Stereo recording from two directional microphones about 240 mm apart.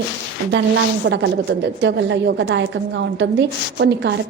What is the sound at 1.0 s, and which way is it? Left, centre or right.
A woman's voice, right.